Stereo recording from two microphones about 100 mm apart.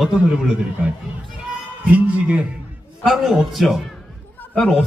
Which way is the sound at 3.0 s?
5° right (ahead or behind).